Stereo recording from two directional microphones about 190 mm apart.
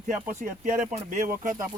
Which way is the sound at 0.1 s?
40° right (ahead or behind).